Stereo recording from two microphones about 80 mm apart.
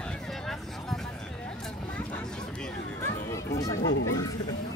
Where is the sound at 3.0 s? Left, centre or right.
Left.